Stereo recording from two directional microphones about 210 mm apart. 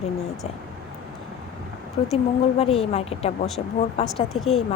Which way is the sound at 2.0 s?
25° left (ahead or behind).